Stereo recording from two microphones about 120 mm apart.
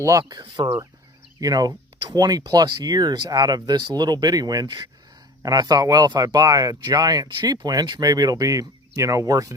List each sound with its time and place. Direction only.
0.0 s speech: 25° right (ahead or behind)
0.3 s speech: 40° right (ahead or behind)